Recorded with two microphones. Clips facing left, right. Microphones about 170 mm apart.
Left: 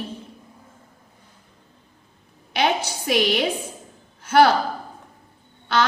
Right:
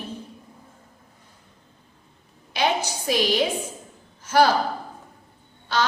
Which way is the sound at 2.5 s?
60° left (ahead or behind).